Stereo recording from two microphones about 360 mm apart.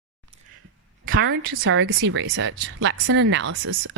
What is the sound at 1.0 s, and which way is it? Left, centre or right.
Speech, right.